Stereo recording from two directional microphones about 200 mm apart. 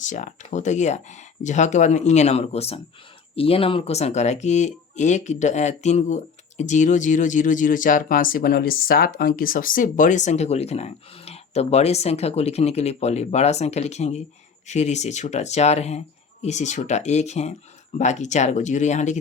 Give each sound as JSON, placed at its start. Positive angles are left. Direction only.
{"t": 0.0, "sound": "speech", "side_deg": 40}